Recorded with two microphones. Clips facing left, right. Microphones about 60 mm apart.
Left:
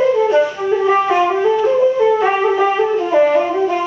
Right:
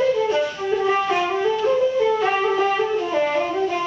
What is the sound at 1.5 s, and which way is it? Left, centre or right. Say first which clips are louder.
Music: left 4 dB; centre.